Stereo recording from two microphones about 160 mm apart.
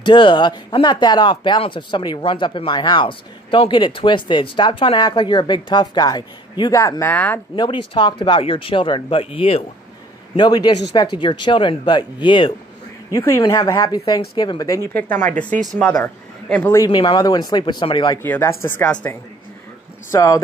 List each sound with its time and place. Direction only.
0.0 s speech: 30° left (ahead or behind); by 7.3 s 10° left (ahead or behind)
7.5 s speech: 30° left (ahead or behind)
13.1 s speech: 15° left (ahead or behind)
15.0 s a woman's voice: 10° left (ahead or behind)
16.7 s speech: 20° left (ahead or behind)
18.2 s speech: 15° left (ahead or behind)